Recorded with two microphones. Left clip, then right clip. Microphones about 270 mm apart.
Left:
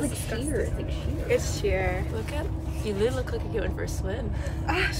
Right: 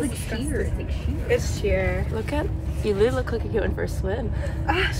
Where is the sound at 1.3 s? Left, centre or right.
Centre.